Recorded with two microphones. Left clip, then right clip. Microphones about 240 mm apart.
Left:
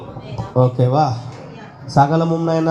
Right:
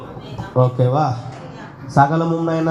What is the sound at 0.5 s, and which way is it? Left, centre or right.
Speech, left.